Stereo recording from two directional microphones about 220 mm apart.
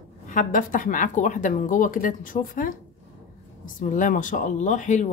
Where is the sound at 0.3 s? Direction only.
35° left (ahead or behind).